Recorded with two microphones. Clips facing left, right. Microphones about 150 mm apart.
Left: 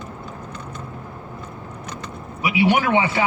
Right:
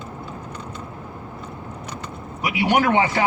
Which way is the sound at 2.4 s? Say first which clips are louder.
Left 1 dB; 45° right (ahead or behind).